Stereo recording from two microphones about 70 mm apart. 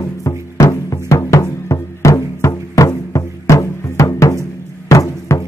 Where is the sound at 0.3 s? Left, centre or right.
Left.